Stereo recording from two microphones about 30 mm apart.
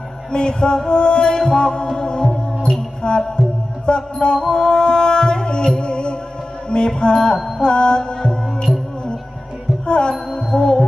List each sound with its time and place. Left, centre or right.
0.3 s music: left
3.8 s music: left
9.8 s music: left